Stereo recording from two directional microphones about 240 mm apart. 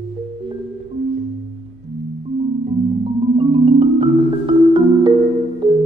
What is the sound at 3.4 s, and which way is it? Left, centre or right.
Music, right.